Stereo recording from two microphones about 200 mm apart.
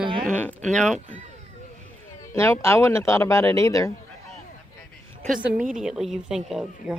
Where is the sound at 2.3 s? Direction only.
15° left (ahead or behind).